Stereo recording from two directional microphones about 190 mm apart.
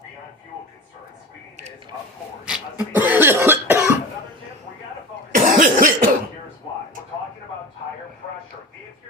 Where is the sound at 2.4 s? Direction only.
5° right (ahead or behind).